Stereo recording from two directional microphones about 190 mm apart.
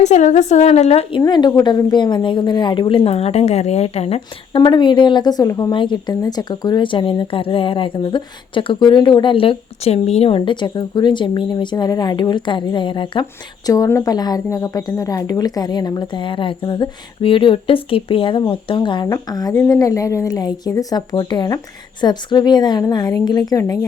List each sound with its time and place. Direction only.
0.0 s a woman's voice: 40° left (ahead or behind)
1.2 s a woman's voice: 20° left (ahead or behind)